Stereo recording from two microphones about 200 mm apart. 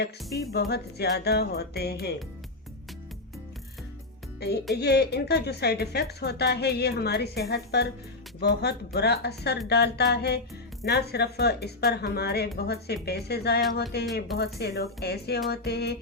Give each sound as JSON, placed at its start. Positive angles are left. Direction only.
{"t": 0.3, "sound": "speech", "side_deg": 55}
{"t": 4.4, "sound": "speech", "side_deg": 55}